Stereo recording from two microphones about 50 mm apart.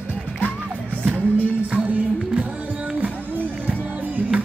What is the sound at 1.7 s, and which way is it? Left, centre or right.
Music, right.